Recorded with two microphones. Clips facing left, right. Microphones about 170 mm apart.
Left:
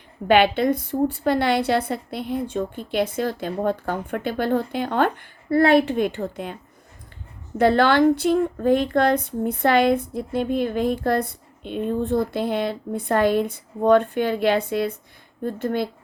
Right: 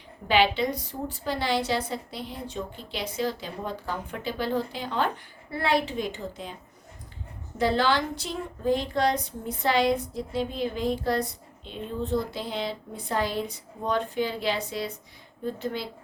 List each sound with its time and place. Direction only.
0.3 s speech: 55° left (ahead or behind)
7.6 s speech: 60° left (ahead or behind)